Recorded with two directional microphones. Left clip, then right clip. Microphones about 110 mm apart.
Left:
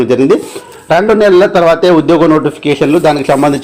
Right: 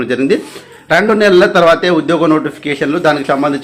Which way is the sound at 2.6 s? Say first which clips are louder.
Left 4 dB; 60° left (ahead or behind).